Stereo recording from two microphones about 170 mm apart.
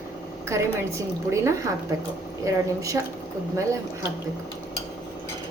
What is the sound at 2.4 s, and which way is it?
Speech, 20° right (ahead or behind).